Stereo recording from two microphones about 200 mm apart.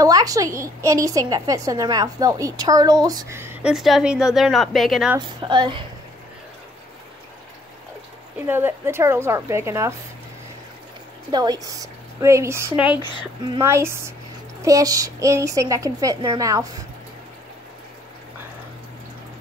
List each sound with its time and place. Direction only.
0.0 s a woman's voice: 20° right (ahead or behind); by 5.1 s centre (ahead or behind)
5.1 s a woman's voice: 20° right (ahead or behind)
8.4 s a woman's voice: 10° right (ahead or behind)
11.3 s a woman's voice: 20° right (ahead or behind)